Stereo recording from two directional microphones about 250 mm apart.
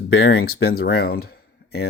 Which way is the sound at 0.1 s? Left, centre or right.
Left.